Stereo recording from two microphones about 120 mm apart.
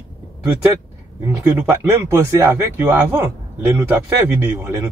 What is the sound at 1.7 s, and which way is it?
Speech, 20° right (ahead or behind).